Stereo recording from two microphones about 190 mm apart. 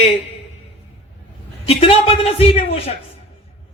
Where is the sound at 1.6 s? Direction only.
30° left (ahead or behind).